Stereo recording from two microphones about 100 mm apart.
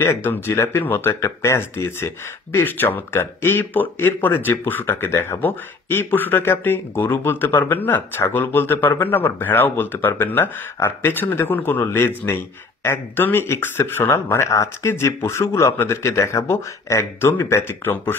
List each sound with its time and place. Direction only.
0.0 s speech: 25° left (ahead or behind)